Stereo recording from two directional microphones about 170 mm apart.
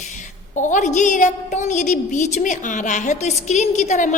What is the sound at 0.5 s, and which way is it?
A woman's voice, 45° left (ahead or behind).